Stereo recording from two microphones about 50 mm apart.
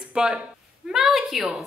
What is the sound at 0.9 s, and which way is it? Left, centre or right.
Speech, centre.